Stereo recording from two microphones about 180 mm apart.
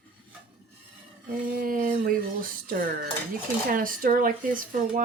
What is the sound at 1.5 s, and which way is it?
Speech, 50° right (ahead or behind).